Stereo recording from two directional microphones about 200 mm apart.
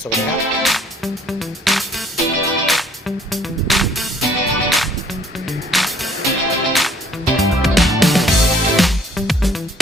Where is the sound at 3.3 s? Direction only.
Centre (ahead or behind).